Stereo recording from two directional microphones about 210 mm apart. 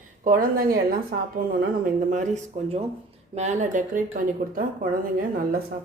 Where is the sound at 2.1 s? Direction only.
35° right (ahead or behind).